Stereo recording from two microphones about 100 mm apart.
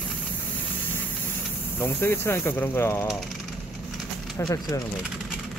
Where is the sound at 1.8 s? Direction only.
20° left (ahead or behind).